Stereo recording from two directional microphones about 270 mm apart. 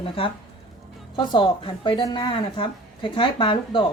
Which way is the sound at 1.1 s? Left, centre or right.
Centre.